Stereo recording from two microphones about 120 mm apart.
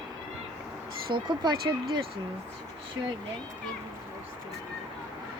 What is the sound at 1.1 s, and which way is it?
Speech, 40° right (ahead or behind).